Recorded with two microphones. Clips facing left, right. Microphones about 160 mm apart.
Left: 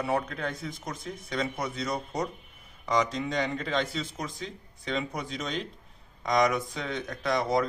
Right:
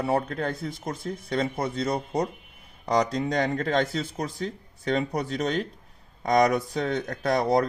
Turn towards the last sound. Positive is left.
turn(degrees=-40)  # may be behind; listen again after turning